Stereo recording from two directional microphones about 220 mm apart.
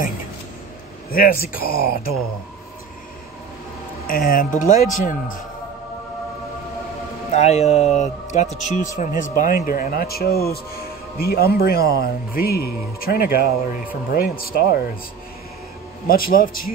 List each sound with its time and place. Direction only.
1.1 s speech: 40° left (ahead or behind)
4.1 s speech: 40° left (ahead or behind)
7.3 s speech: 30° left (ahead or behind)
16.1 s speech: 40° left (ahead or behind)